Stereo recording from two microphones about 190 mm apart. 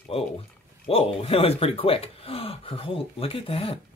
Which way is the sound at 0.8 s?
30° left (ahead or behind).